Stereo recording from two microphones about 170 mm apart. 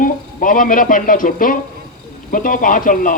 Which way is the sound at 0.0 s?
50° left (ahead or behind).